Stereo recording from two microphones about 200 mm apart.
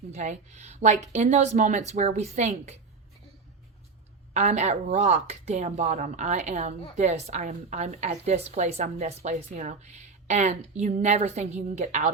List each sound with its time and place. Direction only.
0.1 s speech: 35° right (ahead or behind)
4.4 s speech: 35° right (ahead or behind)